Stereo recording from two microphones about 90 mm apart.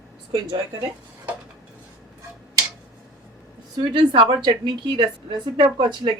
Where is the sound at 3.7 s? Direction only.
60° right (ahead or behind).